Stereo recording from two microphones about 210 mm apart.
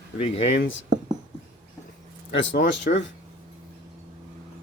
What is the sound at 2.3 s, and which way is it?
Speech, 60° left (ahead or behind).